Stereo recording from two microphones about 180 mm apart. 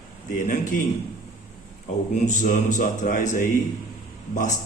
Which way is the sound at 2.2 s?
45° left (ahead or behind).